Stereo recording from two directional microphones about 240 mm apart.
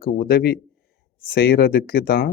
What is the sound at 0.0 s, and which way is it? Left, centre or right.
A man's voice, left.